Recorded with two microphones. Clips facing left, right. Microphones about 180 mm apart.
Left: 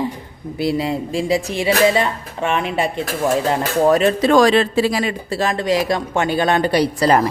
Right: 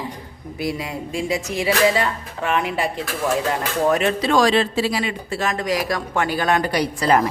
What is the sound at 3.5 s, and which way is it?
Speech, 35° left (ahead or behind).